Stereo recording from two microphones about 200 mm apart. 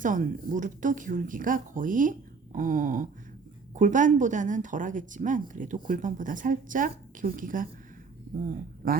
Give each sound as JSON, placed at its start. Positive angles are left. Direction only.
{"t": 0.0, "sound": "speech", "side_deg": -40}